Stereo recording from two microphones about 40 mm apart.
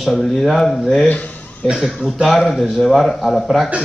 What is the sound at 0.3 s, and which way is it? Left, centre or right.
Speech, centre.